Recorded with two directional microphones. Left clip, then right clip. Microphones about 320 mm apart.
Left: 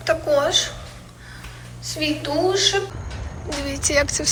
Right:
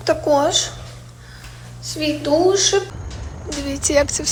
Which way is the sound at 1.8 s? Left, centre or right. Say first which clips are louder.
Right 2 dB; centre.